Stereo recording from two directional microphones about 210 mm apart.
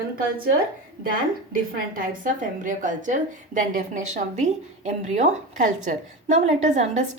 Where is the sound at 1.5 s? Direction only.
40° right (ahead or behind).